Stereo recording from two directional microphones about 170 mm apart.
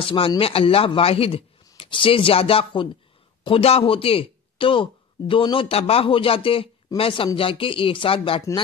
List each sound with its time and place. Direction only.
0.0 s speech: 30° left (ahead or behind)